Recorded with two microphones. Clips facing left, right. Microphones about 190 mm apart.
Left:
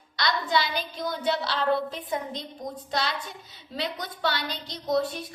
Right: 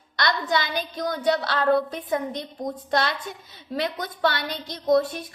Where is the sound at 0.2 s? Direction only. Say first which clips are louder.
Right 2 dB; 50° right (ahead or behind).